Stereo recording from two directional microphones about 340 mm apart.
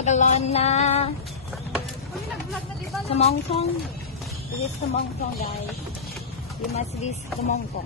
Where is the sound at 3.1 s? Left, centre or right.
Centre.